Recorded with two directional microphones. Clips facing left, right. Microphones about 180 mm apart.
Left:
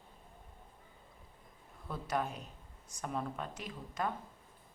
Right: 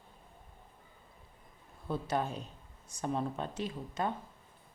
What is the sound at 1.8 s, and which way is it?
Speech, 30° right (ahead or behind).